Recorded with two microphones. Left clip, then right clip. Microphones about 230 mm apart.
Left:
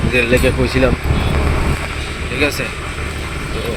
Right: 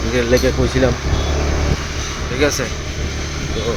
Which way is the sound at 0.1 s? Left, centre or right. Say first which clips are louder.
Left 2 dB; centre.